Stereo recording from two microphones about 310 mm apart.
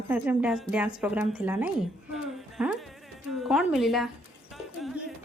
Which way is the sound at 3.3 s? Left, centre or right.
Centre.